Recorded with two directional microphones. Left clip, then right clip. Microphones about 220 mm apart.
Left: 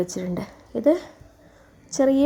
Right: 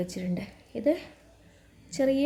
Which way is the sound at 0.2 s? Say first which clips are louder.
Left 6 dB; 15° left (ahead or behind).